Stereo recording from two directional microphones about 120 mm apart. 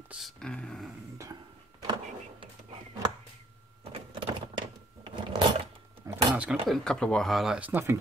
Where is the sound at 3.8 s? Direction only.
50° right (ahead or behind).